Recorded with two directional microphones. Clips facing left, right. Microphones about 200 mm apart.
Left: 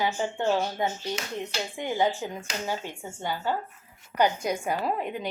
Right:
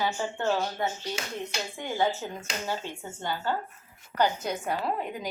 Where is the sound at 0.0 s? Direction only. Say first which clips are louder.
Left 2 dB; 15° left (ahead or behind).